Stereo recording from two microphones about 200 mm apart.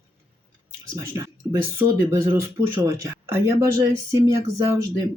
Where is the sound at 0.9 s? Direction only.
15° right (ahead or behind).